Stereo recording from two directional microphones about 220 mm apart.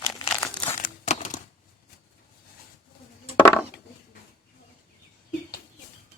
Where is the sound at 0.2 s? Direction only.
15° left (ahead or behind).